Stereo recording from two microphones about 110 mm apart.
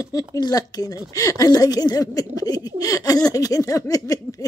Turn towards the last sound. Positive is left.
turn(degrees=35)  # may be behind; listen again after turning